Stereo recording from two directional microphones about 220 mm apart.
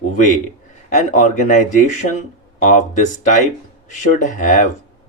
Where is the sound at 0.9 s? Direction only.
35° left (ahead or behind).